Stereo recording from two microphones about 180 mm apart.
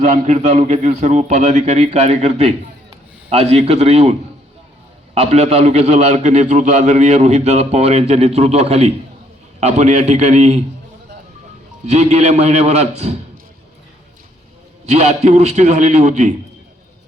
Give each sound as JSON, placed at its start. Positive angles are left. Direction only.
{"t": 0.0, "sound": "a man's voice", "side_deg": -40}
{"t": 11.9, "sound": "a man's voice", "side_deg": -40}
{"t": 14.8, "sound": "a man's voice", "side_deg": -35}